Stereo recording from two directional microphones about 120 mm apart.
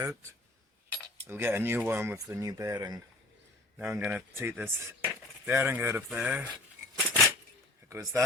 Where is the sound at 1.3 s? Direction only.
20° right (ahead or behind).